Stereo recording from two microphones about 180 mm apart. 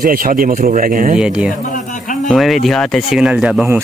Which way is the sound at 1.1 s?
5° right (ahead or behind).